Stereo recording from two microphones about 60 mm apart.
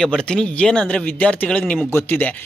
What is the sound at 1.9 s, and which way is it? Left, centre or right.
Speech, left.